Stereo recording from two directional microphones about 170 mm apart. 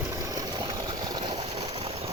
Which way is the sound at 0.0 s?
20° right (ahead or behind).